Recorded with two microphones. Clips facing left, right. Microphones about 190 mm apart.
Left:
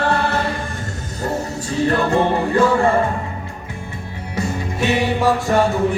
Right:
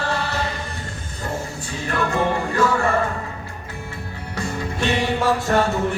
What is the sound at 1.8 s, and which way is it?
Music, 35° left (ahead or behind).